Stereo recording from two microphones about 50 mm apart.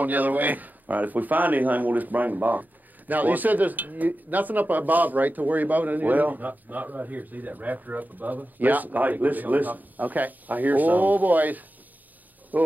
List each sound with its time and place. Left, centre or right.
0.0 s speech: right